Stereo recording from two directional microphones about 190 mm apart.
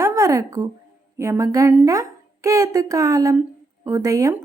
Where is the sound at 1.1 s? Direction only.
15° right (ahead or behind).